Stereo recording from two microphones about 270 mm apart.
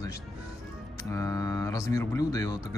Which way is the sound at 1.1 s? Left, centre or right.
Centre.